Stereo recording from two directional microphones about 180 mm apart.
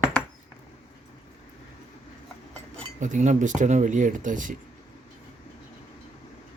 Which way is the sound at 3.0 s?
45° right (ahead or behind).